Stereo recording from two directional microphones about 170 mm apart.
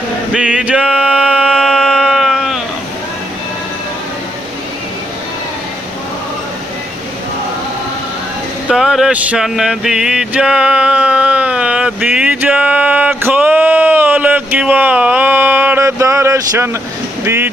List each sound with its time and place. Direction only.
0.3 s male singing: 5° right (ahead or behind)
8.6 s a sound: 5° right (ahead or behind)
17.2 s speech: 15° right (ahead or behind)